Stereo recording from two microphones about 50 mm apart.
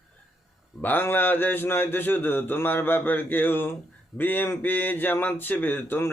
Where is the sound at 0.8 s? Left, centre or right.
Left.